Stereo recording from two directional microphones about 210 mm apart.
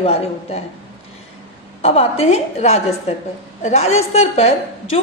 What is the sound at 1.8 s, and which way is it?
A woman's voice, 30° left (ahead or behind).